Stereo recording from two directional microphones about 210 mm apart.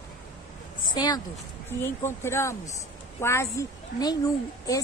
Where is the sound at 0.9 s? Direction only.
20° left (ahead or behind).